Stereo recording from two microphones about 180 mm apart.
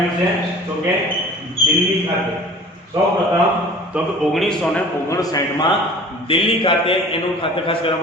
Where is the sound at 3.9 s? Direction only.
Centre (ahead or behind).